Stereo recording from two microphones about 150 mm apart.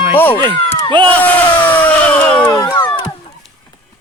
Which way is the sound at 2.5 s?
25° left (ahead or behind).